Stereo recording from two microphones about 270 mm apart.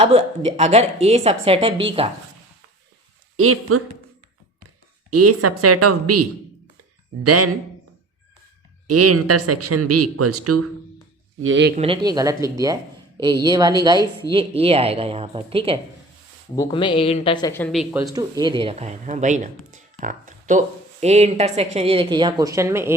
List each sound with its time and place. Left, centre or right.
0.0 s speech: right
3.3 s speech: right
5.1 s speech: right
7.3 s speech: right
8.9 s speech: right
11.3 s speech: right
11.8 s speech: centre
16.6 s speech: centre
18.0 s speech: centre